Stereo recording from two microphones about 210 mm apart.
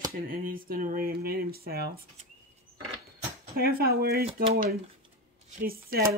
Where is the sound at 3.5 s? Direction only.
45° right (ahead or behind).